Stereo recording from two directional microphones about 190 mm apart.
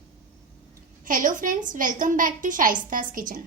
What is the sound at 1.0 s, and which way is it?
A woman's voice, 45° right (ahead or behind).